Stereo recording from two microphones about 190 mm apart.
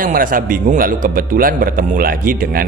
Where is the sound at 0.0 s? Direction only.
45° right (ahead or behind).